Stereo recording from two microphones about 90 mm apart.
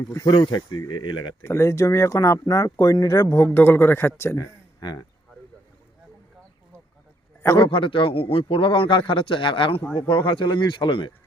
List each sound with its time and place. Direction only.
0.3 s speech: 55° left (ahead or behind)
1.5 s speech: 30° left (ahead or behind)
3.4 s speech: 20° left (ahead or behind)
4.8 s speech: 60° left (ahead or behind)
7.6 s a man's voice: 75° left (ahead or behind)